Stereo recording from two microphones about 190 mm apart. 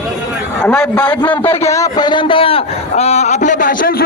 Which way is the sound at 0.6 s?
5° left (ahead or behind).